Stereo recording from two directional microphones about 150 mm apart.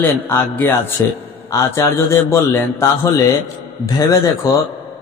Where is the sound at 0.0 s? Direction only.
15° left (ahead or behind).